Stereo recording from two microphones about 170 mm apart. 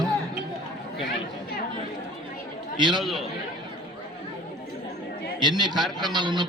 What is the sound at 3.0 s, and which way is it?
Speech, centre (ahead or behind).